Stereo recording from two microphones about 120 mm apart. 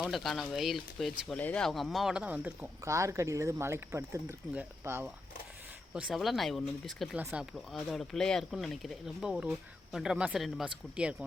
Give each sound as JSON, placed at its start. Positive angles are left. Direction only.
{"t": 0.0, "sound": "speech", "side_deg": 0}
{"t": 1.4, "sound": "speech", "side_deg": 10}
{"t": 2.8, "sound": "speech", "side_deg": -25}
{"t": 5.9, "sound": "speech", "side_deg": -5}